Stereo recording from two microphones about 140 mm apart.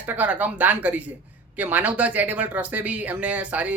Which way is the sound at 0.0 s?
10° right (ahead or behind).